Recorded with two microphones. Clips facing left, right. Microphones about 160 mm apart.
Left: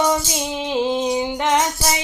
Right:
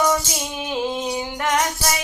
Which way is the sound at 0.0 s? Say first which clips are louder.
Left 1 dB; 25° left (ahead or behind).